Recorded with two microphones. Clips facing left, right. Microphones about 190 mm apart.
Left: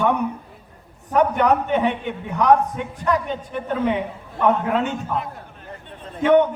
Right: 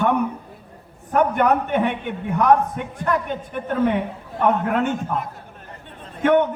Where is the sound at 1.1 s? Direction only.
50° right (ahead or behind).